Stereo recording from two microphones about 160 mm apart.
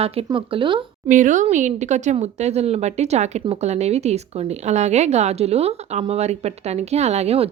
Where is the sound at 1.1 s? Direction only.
55° right (ahead or behind).